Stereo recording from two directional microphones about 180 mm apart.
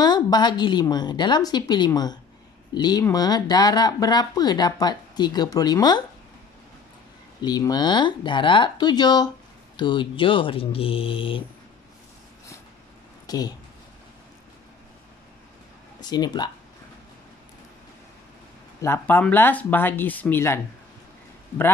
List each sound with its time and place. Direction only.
0.0 s speech: 25° left (ahead or behind)
7.4 s speech: 20° left (ahead or behind)
13.3 s speech: 20° left (ahead or behind)
16.0 s speech: 25° left (ahead or behind)
18.8 s speech: 10° left (ahead or behind)